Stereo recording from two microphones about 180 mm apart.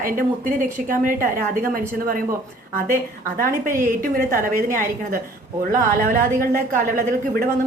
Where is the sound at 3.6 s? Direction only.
50° right (ahead or behind).